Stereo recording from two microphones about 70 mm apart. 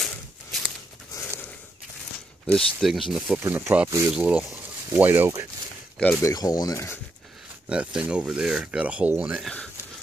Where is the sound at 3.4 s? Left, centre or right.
Right.